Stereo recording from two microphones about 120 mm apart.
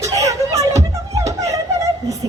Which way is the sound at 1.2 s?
25° right (ahead or behind).